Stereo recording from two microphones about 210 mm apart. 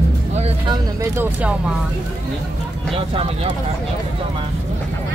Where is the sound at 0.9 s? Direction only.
10° right (ahead or behind).